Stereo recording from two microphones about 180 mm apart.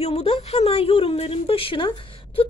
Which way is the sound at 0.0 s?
35° left (ahead or behind).